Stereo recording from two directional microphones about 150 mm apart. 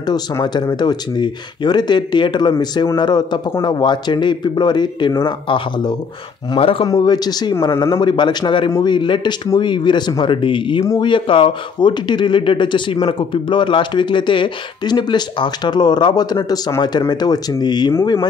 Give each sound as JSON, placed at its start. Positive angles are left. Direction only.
{"t": 0.0, "sound": "speech", "side_deg": 30}